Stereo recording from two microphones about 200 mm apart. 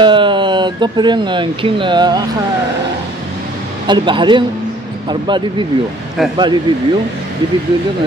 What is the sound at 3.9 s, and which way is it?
Speech, 25° right (ahead or behind).